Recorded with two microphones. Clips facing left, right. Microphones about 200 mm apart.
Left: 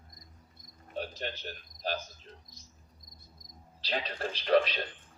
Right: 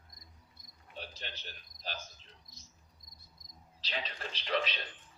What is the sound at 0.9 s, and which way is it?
Cricket, 45° left (ahead or behind).